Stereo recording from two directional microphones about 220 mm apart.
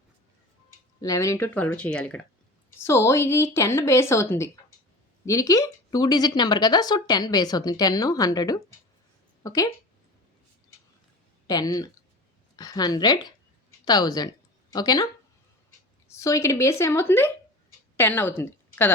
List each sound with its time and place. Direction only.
1.0 s speech: 15° left (ahead or behind)
11.4 s speech: 15° left (ahead or behind)
16.0 s a woman's voice: 15° left (ahead or behind)